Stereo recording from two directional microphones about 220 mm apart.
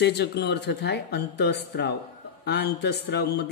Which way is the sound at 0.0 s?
50° left (ahead or behind).